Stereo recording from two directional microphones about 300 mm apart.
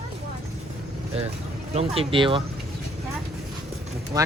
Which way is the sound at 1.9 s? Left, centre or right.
Centre.